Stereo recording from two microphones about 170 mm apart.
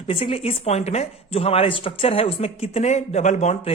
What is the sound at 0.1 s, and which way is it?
A woman's voice, 35° left (ahead or behind).